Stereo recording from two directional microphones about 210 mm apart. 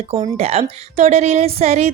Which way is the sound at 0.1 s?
30° right (ahead or behind).